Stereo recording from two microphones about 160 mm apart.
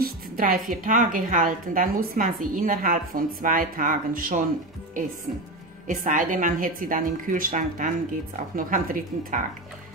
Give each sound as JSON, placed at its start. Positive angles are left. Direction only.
{"t": 0.0, "sound": "a woman's voice", "side_deg": -60}
{"t": 5.9, "sound": "a woman's voice", "side_deg": -55}